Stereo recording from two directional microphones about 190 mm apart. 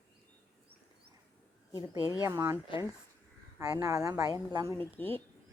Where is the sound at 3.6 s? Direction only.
15° right (ahead or behind).